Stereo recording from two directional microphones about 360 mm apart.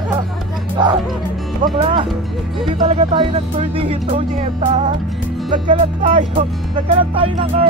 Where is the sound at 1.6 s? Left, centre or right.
Centre.